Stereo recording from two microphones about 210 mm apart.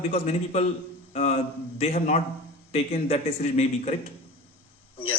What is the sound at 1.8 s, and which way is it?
A man's voice, 30° left (ahead or behind).